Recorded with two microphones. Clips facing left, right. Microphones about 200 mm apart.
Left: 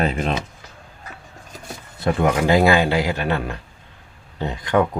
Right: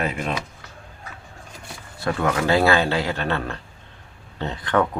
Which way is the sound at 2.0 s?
20° left (ahead or behind).